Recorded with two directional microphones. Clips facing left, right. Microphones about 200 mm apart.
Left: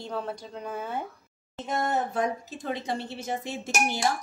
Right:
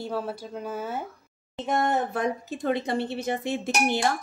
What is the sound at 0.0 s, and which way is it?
Speech, 5° right (ahead or behind).